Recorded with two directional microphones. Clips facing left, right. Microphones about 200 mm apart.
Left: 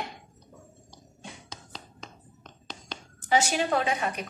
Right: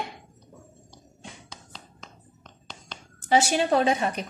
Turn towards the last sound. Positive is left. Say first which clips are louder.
# right 4 dB
turn(degrees=-30)  # may be behind; listen again after turning